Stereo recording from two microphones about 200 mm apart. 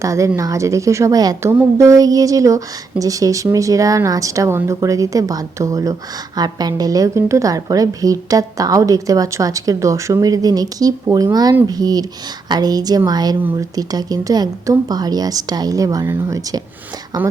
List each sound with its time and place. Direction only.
0.0 s a woman's voice: 15° right (ahead or behind)